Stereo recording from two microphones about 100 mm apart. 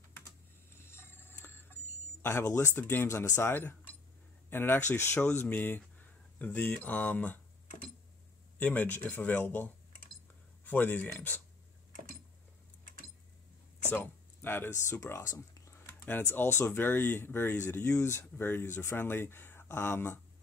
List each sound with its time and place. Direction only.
0.1 s a sound: 25° left (ahead or behind)
2.2 s speech: 25° left (ahead or behind)
8.5 s speech: 15° left (ahead or behind)
13.8 s speech: 20° left (ahead or behind)